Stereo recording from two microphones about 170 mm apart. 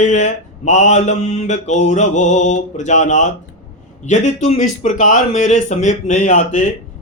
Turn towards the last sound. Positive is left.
turn(degrees=45)  # may be behind; listen again after turning